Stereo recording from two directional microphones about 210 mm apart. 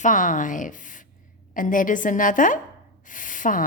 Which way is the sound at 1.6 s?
40° left (ahead or behind).